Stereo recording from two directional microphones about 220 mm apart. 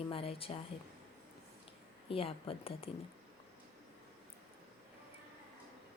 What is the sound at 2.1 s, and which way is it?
Speech, 25° left (ahead or behind).